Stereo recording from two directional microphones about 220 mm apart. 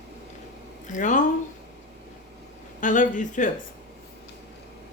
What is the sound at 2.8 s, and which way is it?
Speech, 35° left (ahead or behind).